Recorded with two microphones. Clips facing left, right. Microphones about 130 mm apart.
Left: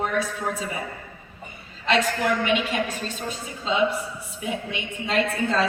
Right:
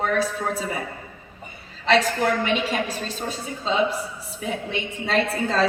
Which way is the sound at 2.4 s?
35° right (ahead or behind).